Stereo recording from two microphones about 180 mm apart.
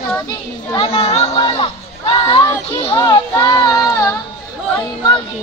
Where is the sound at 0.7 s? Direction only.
30° left (ahead or behind).